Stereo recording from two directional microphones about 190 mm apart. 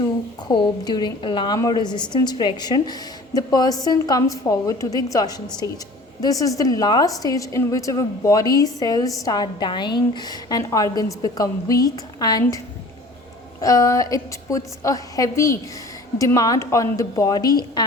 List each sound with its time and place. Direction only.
0.4 s a woman's voice: 25° left (ahead or behind)